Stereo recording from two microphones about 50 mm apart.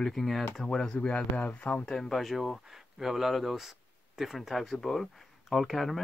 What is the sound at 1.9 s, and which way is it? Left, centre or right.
Speech, centre.